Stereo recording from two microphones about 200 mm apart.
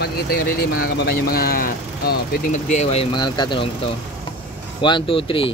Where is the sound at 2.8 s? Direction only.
30° left (ahead or behind).